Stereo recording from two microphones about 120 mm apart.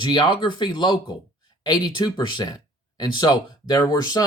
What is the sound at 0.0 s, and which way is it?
Speech, 40° left (ahead or behind).